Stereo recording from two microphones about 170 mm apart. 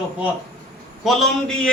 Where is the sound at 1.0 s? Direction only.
Centre (ahead or behind).